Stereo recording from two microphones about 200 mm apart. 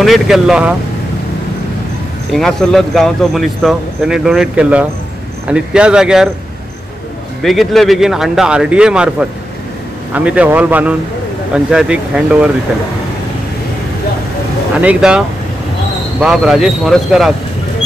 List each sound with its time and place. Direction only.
0.0 s speech: centre (ahead or behind)
2.3 s speech: centre (ahead or behind)
7.4 s speech: centre (ahead or behind)
10.1 s speech: 5° right (ahead or behind)
14.8 s speech: 5° right (ahead or behind)